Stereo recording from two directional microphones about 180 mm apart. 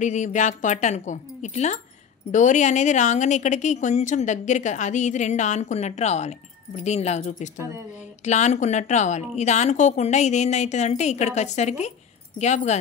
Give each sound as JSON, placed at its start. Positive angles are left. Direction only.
{"t": 0.0, "sound": "a woman's voice", "side_deg": 40}